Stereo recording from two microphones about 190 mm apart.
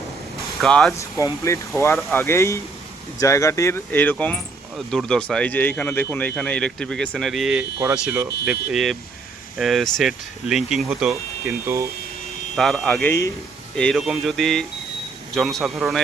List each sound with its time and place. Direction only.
0.6 s speech: centre (ahead or behind)
0.9 s speech: 15° left (ahead or behind); by 11.1 s 5° right (ahead or behind)
11.1 s speech: 15° right (ahead or behind)
12.5 s speech: centre (ahead or behind)